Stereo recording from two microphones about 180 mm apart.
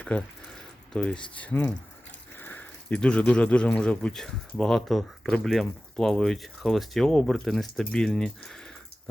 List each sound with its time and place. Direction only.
0.1 s speech: 10° left (ahead or behind)